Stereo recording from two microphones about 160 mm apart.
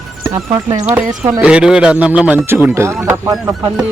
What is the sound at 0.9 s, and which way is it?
Speech, 15° right (ahead or behind).